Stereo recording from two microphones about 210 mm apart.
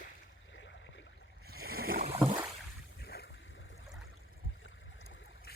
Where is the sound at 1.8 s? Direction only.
45° right (ahead or behind).